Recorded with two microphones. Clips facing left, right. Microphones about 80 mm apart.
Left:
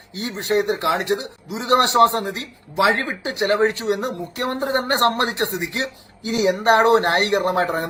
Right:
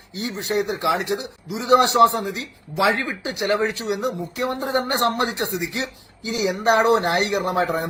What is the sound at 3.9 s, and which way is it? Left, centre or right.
Speech, left.